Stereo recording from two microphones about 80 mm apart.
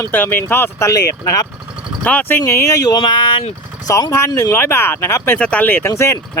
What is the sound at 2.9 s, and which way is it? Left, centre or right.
Speech, left.